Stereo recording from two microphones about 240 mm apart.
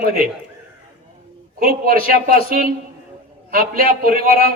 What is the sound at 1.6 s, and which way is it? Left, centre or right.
Speech, right.